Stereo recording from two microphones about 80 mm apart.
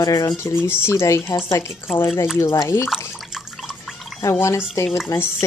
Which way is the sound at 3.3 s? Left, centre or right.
Centre.